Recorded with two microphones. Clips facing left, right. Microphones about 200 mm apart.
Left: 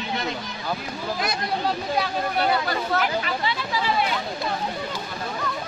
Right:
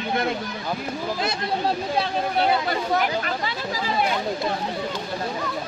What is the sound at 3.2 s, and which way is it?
Speech, 45° right (ahead or behind).